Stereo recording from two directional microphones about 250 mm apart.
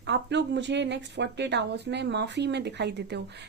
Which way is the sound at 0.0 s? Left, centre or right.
Right.